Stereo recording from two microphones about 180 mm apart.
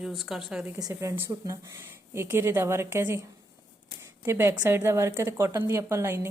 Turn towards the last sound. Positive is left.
turn(degrees=-15)  # may be behind; listen again after turning